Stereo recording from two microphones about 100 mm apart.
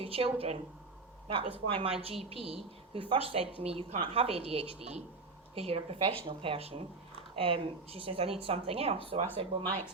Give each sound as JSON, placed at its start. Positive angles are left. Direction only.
{"t": 0.0, "sound": "a woman's voice", "side_deg": -70}
{"t": 1.3, "sound": "a woman's voice", "side_deg": -65}
{"t": 4.0, "sound": "a woman's voice", "side_deg": -75}
{"t": 6.2, "sound": "a woman's voice", "side_deg": -65}
{"t": 7.3, "sound": "a woman's voice", "side_deg": -65}